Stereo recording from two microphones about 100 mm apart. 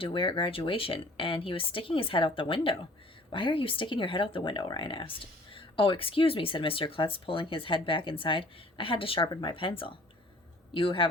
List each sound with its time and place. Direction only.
0.0 s speech: 55° left (ahead or behind)